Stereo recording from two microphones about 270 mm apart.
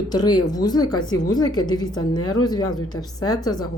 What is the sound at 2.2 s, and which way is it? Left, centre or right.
Speech, left.